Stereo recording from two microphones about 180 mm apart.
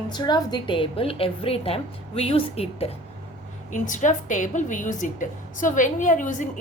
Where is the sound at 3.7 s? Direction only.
45° left (ahead or behind).